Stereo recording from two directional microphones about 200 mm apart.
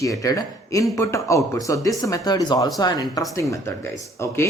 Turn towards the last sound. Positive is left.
turn(degrees=15)  # may be behind; listen again after turning